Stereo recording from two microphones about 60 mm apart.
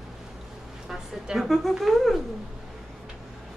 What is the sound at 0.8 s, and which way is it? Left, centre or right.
A woman's voice, centre.